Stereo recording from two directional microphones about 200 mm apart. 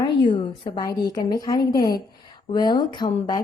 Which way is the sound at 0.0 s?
25° left (ahead or behind).